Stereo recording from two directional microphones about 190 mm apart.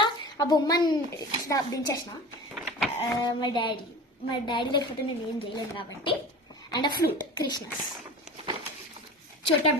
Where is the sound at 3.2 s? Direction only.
20° left (ahead or behind).